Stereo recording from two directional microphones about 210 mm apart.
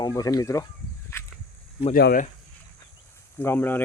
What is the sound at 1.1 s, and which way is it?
Whip, 10° left (ahead or behind).